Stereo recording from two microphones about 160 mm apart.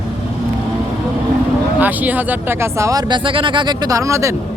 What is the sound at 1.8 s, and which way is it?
Speech, 10° right (ahead or behind).